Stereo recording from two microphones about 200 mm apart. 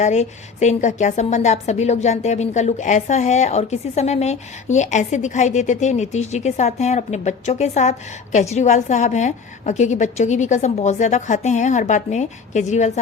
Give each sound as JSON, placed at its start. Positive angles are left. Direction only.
{"t": 0.0, "sound": "a woman's voice", "side_deg": 35}